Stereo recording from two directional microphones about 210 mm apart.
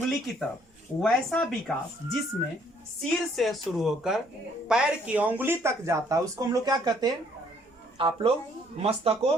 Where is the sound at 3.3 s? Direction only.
Centre (ahead or behind).